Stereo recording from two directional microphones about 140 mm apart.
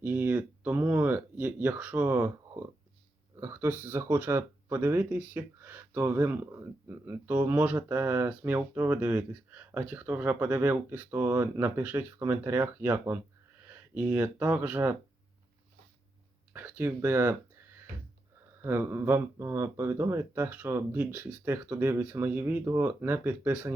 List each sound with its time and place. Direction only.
0.0 s a sound: 15° right (ahead or behind)
3.4 s speech: 15° right (ahead or behind)
16.5 s speech: 15° right (ahead or behind)
18.6 s speech: 15° right (ahead or behind)